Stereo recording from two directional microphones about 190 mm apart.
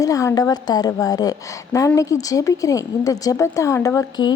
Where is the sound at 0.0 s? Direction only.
15° left (ahead or behind).